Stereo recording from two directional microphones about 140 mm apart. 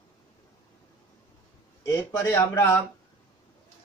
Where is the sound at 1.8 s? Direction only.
20° left (ahead or behind).